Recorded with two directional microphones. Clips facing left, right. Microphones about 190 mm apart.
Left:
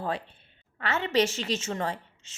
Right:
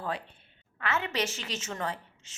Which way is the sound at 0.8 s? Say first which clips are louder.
Left 6 dB; 30° left (ahead or behind).